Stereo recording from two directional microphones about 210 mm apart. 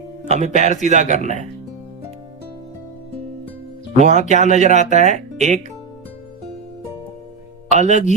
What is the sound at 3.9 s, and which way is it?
Speech, 35° right (ahead or behind).